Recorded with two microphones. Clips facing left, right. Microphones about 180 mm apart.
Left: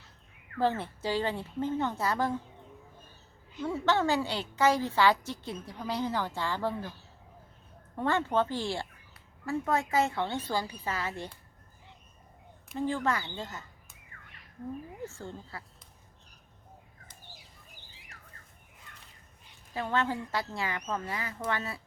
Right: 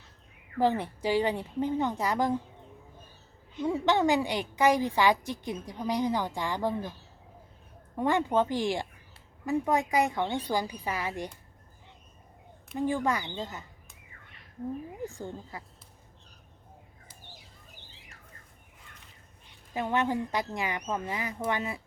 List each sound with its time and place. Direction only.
0.6 s a woman's voice: 15° right (ahead or behind)
3.6 s a woman's voice: 15° right (ahead or behind)
7.9 s a woman's voice: 15° right (ahead or behind)
12.7 s a woman's voice: 15° right (ahead or behind)
15.0 s a woman's voice: 15° right (ahead or behind)
19.7 s a woman's voice: 15° right (ahead or behind)